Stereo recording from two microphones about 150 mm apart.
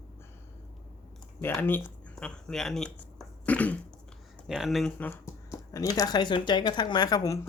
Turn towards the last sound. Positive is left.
turn(degrees=25)  # may be behind; listen again after turning